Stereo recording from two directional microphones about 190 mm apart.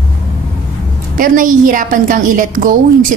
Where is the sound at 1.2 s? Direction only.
45° right (ahead or behind).